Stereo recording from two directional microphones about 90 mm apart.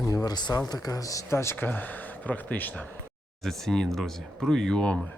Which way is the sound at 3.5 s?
5° left (ahead or behind).